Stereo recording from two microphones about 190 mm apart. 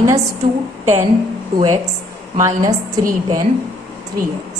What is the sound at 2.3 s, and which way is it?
Speech, 20° right (ahead or behind).